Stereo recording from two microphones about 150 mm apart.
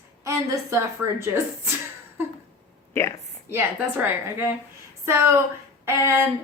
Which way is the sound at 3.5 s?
15° right (ahead or behind).